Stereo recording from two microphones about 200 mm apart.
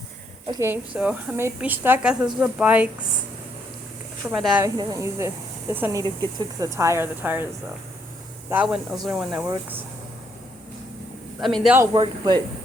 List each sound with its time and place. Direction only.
0.6 s a woman's voice: 10° right (ahead or behind)
4.3 s speech: 5° right (ahead or behind)
4.6 s a woman's voice: 15° right (ahead or behind)
8.4 s a woman's voice: 5° right (ahead or behind)
11.3 s speech: centre (ahead or behind)
11.8 s speech: 20° right (ahead or behind)